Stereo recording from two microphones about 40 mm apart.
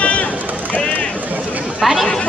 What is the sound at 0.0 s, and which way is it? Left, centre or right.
Run, left.